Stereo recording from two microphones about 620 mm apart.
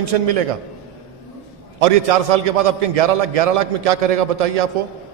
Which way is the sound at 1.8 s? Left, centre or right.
Right.